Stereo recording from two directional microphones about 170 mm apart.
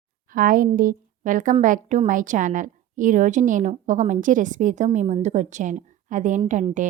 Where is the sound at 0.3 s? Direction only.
55° right (ahead or behind).